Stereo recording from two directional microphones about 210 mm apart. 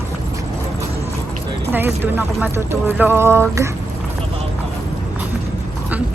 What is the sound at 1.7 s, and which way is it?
Speech, 10° right (ahead or behind).